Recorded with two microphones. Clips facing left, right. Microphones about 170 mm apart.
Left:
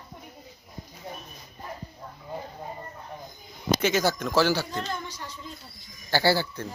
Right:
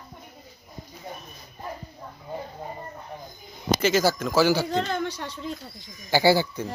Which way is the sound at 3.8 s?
5° right (ahead or behind).